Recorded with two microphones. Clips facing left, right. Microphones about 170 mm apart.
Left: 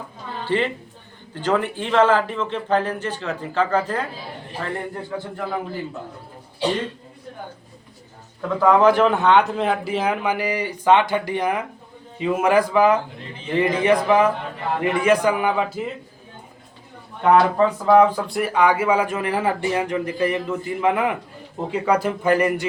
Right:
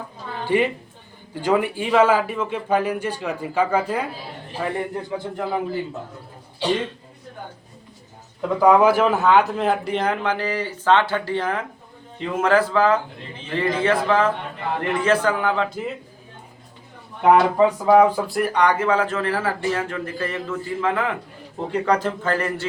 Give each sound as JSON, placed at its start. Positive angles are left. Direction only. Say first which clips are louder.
{"t": 0.4, "sound": "a woman's voice", "louder": "right 2 dB", "side_deg": -15}
{"t": 8.4, "sound": "speech", "louder": "right 1 dB", "side_deg": -10}
{"t": 17.6, "sound": "speech", "louder": "even", "side_deg": -10}
{"t": 18.3, "sound": "speech", "louder": "left 2 dB", "side_deg": 5}